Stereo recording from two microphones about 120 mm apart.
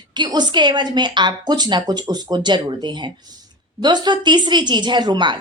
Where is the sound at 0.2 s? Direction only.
35° right (ahead or behind).